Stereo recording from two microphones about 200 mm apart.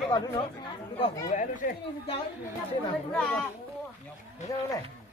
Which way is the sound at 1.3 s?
35° left (ahead or behind).